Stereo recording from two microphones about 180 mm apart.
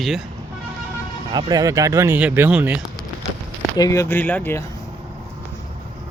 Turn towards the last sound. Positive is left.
turn(degrees=10)  # may be behind; listen again after turning